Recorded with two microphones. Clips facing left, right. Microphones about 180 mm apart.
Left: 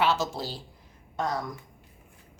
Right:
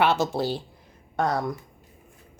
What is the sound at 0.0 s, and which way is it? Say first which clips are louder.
Speech: right 4 dB; 60° right (ahead or behind).